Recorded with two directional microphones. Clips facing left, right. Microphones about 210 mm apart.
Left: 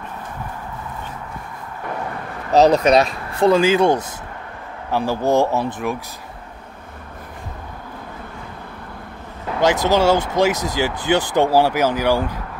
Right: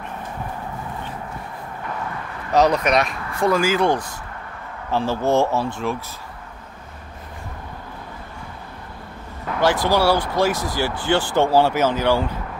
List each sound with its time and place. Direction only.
2.5 s speech: 30° left (ahead or behind)
9.8 s speech: 20° left (ahead or behind)